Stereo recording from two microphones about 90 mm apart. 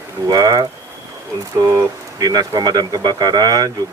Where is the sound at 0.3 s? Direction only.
45° right (ahead or behind).